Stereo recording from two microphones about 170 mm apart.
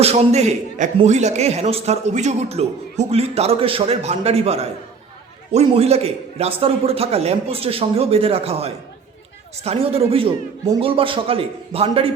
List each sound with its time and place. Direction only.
0.0 s a man's voice: 40° right (ahead or behind)